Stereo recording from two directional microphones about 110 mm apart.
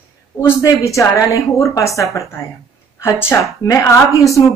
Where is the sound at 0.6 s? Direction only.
30° left (ahead or behind).